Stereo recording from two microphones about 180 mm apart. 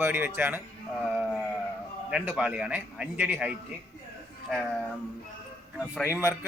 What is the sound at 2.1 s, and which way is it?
Speech, 5° right (ahead or behind).